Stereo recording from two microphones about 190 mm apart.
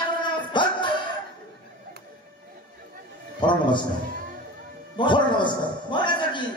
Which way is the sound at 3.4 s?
25° left (ahead or behind).